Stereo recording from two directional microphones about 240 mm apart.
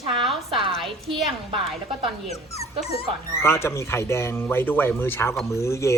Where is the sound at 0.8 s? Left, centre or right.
Centre.